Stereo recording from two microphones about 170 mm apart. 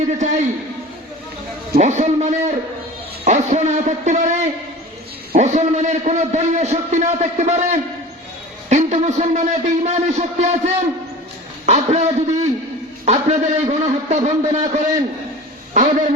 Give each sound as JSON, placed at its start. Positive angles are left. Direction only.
{"t": 0.2, "sound": "a man's voice", "side_deg": -45}
{"t": 1.8, "sound": "a man's voice", "side_deg": -45}